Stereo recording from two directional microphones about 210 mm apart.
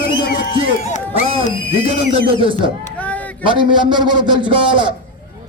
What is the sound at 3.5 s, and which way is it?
A man's voice, 25° right (ahead or behind).